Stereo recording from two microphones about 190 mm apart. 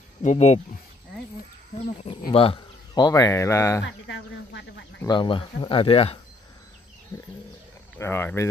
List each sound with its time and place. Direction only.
0.2 s speech: 40° left (ahead or behind)
2.0 s speech: 30° left (ahead or behind)
3.8 s speech: 70° left (ahead or behind)
5.0 s speech: 25° left (ahead or behind)
7.1 s wild animals: 15° left (ahead or behind)
8.0 s speech: 10° left (ahead or behind)